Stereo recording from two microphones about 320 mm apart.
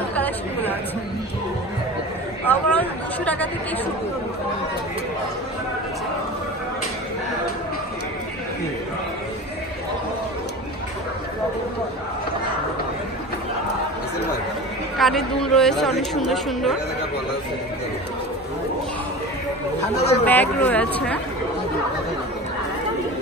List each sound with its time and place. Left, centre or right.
0.1 s chatter: centre
2.4 s speech: centre
15.0 s speech: centre
20.0 s speech: centre
20.2 s speech: centre